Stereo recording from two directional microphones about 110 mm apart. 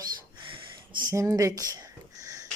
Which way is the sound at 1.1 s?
30° right (ahead or behind).